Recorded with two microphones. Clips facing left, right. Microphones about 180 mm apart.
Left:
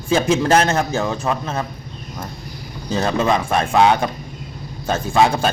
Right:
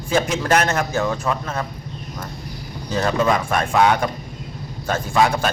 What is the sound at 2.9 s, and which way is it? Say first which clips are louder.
A man's voice: left 1 dB; 25° left (ahead or behind).